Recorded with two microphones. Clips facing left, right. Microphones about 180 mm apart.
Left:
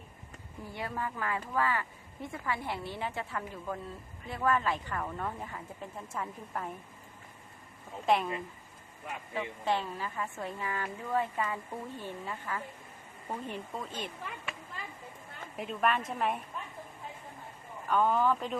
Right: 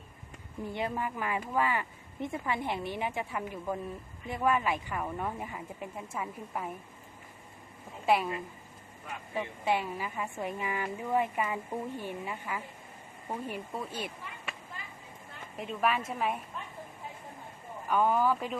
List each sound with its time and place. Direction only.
0.6 s a woman's voice: 20° right (ahead or behind)
8.0 s a woman's voice: 5° right (ahead or behind)
9.3 s a woman's voice: 10° right (ahead or behind)
15.5 s a woman's voice: centre (ahead or behind)
17.8 s a woman's voice: 10° right (ahead or behind)